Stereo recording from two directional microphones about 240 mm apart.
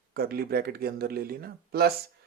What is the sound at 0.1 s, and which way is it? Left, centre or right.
Speech, right.